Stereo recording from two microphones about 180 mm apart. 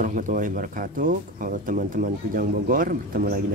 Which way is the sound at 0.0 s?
45° right (ahead or behind).